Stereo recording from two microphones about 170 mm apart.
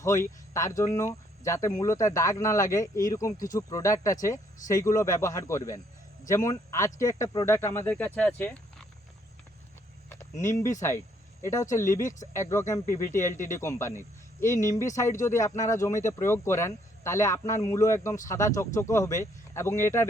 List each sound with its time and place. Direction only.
0.0 s speech: 15° left (ahead or behind)
10.1 s a sound: 15° left (ahead or behind)
10.8 s speech: 15° left (ahead or behind)